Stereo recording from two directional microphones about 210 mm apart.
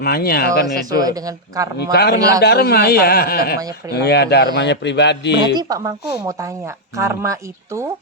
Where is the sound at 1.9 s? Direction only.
50° left (ahead or behind).